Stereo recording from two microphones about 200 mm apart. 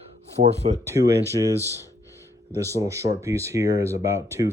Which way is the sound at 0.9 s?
20° right (ahead or behind).